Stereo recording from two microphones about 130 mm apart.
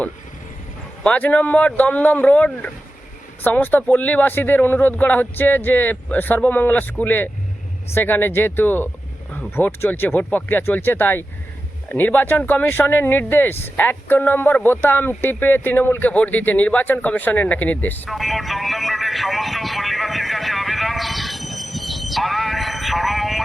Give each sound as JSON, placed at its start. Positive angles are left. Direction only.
{"t": 1.0, "sound": "speech", "side_deg": 10}
{"t": 18.1, "sound": "vehicle", "side_deg": 0}